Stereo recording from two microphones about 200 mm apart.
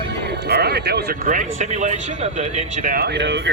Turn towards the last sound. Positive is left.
turn(degrees=-65)  # may be behind; listen again after turning